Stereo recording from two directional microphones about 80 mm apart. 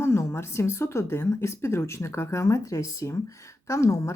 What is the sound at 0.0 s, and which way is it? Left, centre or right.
Speech, left.